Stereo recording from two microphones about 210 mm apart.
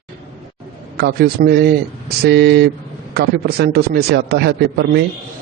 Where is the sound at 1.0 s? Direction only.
50° right (ahead or behind).